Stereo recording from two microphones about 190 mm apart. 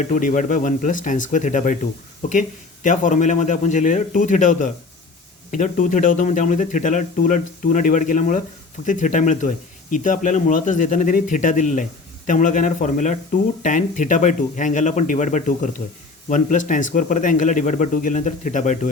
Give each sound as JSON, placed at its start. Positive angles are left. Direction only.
{"t": 0.0, "sound": "speech", "side_deg": 45}